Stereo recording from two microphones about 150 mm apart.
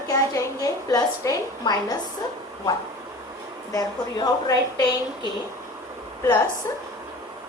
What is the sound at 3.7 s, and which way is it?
A woman's voice, 25° left (ahead or behind).